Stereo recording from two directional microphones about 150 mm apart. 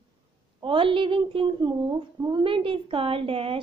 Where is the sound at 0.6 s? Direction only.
35° right (ahead or behind).